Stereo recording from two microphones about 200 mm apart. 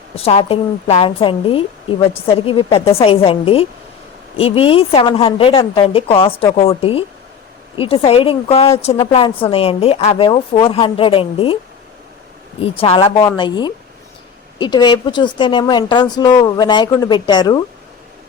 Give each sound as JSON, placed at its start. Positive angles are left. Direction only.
{"t": 0.2, "sound": "a woman's voice", "side_deg": 30}
{"t": 12.6, "sound": "a woman's voice", "side_deg": 30}